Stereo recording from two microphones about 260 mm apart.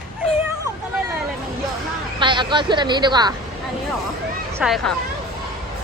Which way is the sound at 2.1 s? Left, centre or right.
Centre.